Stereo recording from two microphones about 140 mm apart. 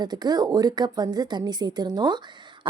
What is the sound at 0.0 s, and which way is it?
A woman's voice, 30° right (ahead or behind).